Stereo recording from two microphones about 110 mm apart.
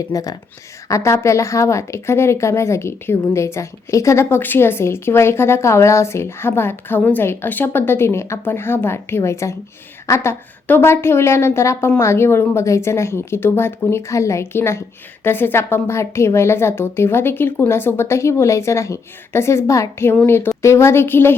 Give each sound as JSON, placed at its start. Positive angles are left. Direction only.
{"t": 0.1, "sound": "a woman's voice", "side_deg": 30}